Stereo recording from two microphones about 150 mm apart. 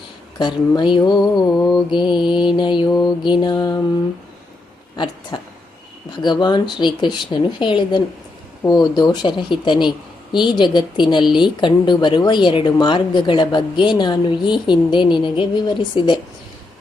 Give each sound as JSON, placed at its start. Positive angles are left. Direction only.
{"t": 0.3, "sound": "mantra", "side_deg": 30}
{"t": 5.3, "sound": "a sound", "side_deg": 30}
{"t": 6.1, "sound": "a woman's voice", "side_deg": 30}